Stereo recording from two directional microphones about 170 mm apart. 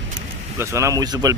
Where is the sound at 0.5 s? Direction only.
15° right (ahead or behind).